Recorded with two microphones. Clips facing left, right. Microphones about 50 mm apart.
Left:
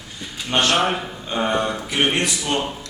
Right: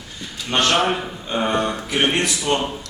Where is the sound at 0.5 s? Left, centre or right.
Centre.